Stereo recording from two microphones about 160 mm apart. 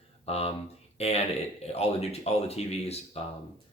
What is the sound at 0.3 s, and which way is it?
Speech, 40° left (ahead or behind).